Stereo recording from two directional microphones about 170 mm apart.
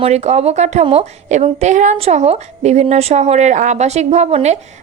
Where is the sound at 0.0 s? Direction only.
40° right (ahead or behind).